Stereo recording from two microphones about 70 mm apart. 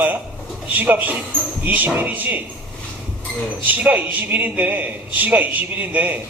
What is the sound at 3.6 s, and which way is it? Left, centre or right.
A man's voice, right.